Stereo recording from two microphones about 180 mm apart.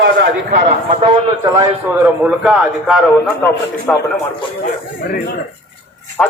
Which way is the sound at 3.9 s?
10° left (ahead or behind).